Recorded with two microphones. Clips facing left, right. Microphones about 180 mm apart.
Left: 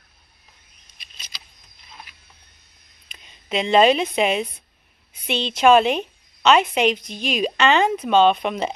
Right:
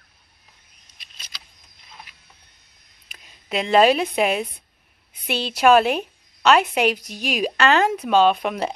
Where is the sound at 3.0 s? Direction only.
5° right (ahead or behind).